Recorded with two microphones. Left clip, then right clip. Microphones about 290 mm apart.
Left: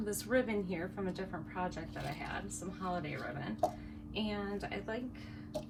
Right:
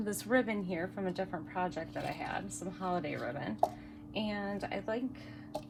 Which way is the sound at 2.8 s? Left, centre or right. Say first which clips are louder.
Right 4 dB; right.